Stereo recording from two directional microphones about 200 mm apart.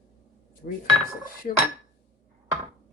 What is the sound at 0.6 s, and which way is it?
Speech, 40° left (ahead or behind).